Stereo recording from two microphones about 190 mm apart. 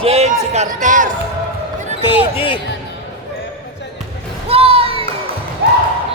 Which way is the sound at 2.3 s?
30° left (ahead or behind).